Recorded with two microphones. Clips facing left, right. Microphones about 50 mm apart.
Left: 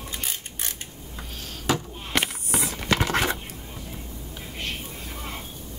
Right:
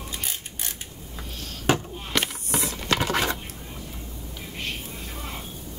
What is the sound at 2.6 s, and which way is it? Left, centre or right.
Patter, centre.